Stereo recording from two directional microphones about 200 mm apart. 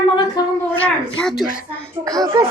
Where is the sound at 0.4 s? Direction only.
20° left (ahead or behind).